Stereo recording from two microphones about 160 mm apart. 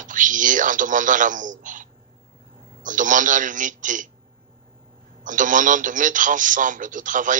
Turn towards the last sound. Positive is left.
turn(degrees=-55)  # may be behind; listen again after turning